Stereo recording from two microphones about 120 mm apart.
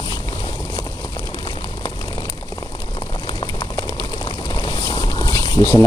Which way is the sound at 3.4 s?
30° left (ahead or behind).